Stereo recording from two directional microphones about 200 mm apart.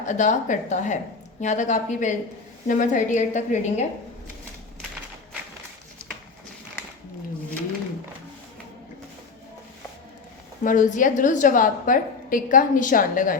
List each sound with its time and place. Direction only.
0.0 s a woman's voice: 35° left (ahead or behind)
10.6 s a woman's voice: 40° left (ahead or behind)